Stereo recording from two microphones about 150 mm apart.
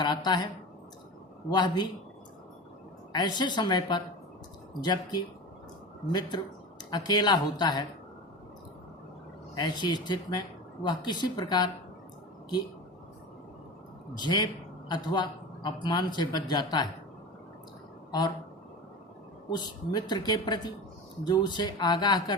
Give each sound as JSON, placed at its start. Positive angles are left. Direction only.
{"t": 1.5, "sound": "a man's voice", "side_deg": 30}
{"t": 3.1, "sound": "a man's voice", "side_deg": 25}
{"t": 9.6, "sound": "a man's voice", "side_deg": 30}
{"t": 14.2, "sound": "a man's voice", "side_deg": 30}
{"t": 19.5, "sound": "a man's voice", "side_deg": 30}